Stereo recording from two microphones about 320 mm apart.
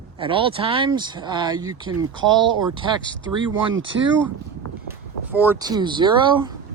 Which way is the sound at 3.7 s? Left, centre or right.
Right.